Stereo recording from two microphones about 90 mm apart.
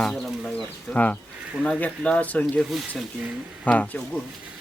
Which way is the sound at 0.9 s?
10° left (ahead or behind).